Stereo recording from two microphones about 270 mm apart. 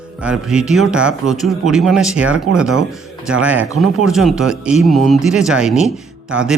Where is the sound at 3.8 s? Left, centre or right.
Centre.